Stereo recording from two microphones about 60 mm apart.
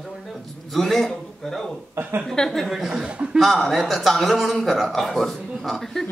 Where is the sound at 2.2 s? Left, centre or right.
Centre.